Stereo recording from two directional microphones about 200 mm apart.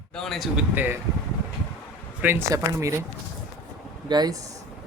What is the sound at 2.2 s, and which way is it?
Speech, 10° right (ahead or behind).